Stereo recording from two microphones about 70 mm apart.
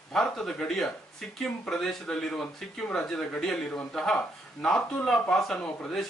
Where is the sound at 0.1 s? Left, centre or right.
Centre.